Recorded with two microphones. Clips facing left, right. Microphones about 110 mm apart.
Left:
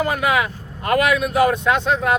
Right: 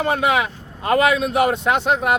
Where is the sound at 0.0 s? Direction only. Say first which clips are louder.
Right 1 dB; 25° right (ahead or behind).